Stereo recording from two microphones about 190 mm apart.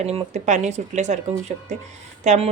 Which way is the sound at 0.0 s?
35° right (ahead or behind).